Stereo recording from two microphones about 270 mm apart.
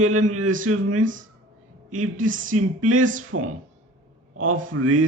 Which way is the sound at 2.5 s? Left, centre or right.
Right.